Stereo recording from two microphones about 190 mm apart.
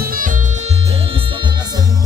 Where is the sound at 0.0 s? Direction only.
45° right (ahead or behind); by 1.9 s 20° right (ahead or behind).